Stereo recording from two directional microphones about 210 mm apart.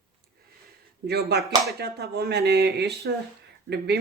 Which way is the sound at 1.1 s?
50° right (ahead or behind).